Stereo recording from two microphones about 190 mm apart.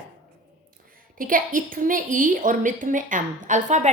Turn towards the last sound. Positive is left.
turn(degrees=-40)  # may be behind; listen again after turning